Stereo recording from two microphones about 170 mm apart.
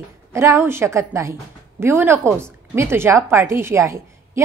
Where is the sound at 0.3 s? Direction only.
15° right (ahead or behind).